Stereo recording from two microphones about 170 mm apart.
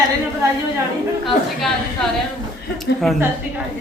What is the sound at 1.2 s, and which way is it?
Speech, centre (ahead or behind).